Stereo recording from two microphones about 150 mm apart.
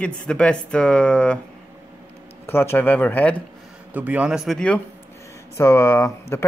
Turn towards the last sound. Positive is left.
turn(degrees=15)  # may be behind; listen again after turning